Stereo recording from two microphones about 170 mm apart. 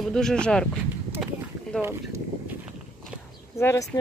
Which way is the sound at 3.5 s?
15° left (ahead or behind).